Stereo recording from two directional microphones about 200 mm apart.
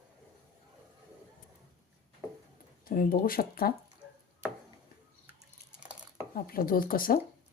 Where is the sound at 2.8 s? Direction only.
45° left (ahead or behind).